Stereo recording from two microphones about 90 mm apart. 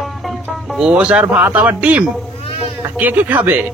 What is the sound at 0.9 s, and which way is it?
Speech, 15° right (ahead or behind).